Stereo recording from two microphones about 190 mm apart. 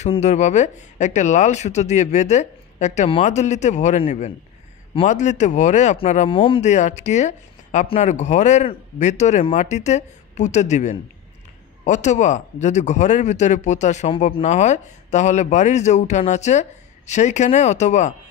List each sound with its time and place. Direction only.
0.0 s speech: 35° left (ahead or behind)